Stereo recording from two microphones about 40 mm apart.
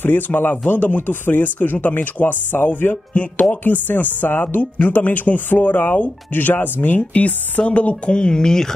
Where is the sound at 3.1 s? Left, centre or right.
Left.